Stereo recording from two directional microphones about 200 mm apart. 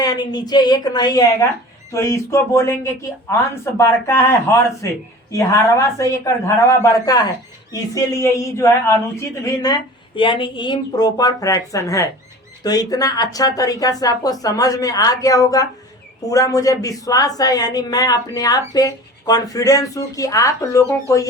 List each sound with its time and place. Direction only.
0.0 s a woman's voice: 20° left (ahead or behind)